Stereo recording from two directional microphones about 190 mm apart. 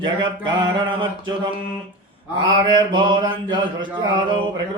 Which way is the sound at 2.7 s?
25° right (ahead or behind).